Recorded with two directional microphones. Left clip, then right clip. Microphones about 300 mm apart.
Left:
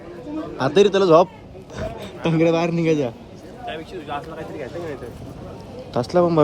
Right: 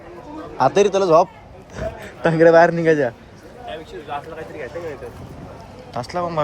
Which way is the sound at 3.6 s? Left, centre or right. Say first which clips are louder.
Left 1 dB; left.